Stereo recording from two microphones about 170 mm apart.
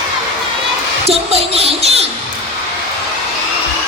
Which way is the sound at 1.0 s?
35° right (ahead or behind).